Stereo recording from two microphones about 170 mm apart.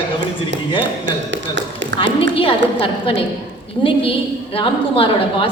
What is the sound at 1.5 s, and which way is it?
Tap, 90° right.